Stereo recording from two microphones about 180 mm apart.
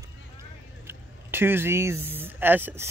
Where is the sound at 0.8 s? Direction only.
10° right (ahead or behind).